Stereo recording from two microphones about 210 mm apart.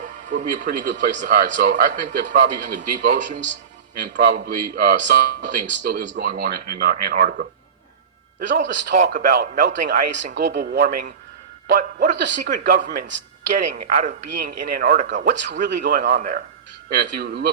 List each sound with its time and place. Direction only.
0.3 s speech: 35° right (ahead or behind)
9.0 s speech: 50° right (ahead or behind)